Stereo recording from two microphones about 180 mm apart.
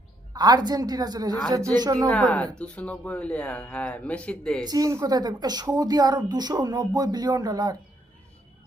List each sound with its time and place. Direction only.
0.3 s a woman's voice: 20° right (ahead or behind)
2.0 s speech: 5° left (ahead or behind)
4.6 s a woman's voice: 20° right (ahead or behind)